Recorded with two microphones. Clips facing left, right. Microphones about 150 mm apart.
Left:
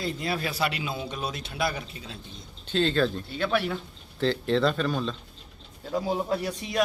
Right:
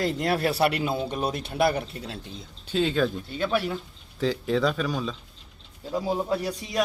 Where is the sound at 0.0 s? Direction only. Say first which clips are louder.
Right 5 dB; 80° right; by 2.1 s 65° right (ahead or behind).